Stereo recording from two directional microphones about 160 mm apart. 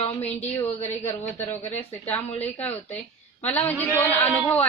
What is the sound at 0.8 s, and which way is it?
A woman's voice, 15° left (ahead or behind).